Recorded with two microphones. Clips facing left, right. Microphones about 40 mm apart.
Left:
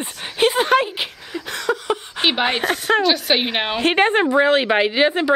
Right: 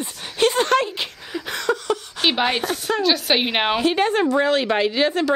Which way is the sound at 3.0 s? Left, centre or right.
Centre.